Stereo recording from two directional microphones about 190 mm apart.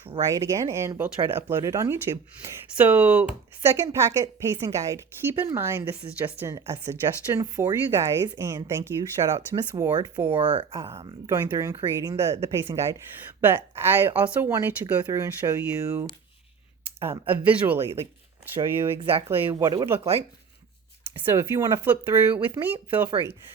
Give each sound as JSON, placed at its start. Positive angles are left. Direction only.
{"t": 0.2, "sound": "speech", "side_deg": -15}
{"t": 11.3, "sound": "speech", "side_deg": -15}
{"t": 21.2, "sound": "speech", "side_deg": -15}